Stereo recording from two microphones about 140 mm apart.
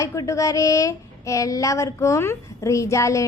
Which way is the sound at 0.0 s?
20° left (ahead or behind).